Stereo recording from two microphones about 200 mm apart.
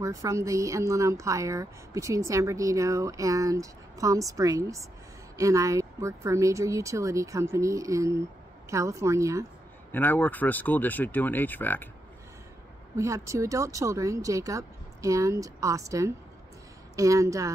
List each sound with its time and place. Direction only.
0.0 s a woman's voice: 15° right (ahead or behind)
9.9 s speech: 10° left (ahead or behind)
12.9 s a woman's voice: 15° right (ahead or behind)